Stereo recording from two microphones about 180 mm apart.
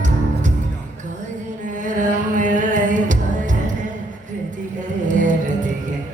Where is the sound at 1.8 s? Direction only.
45° right (ahead or behind).